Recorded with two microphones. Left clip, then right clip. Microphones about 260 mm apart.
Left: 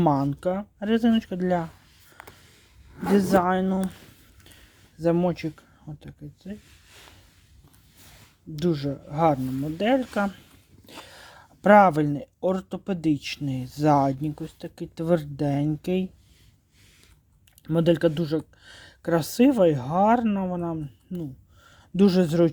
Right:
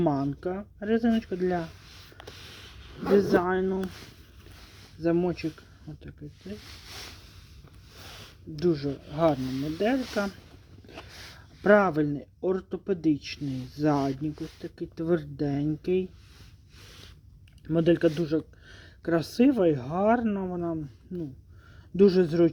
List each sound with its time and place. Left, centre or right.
0.0 s speech: left
3.2 s speech: left
4.9 s speech: left
8.5 s speech: left
11.6 s speech: left
17.7 s speech: left